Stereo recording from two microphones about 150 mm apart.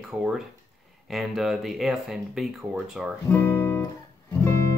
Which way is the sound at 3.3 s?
15° left (ahead or behind).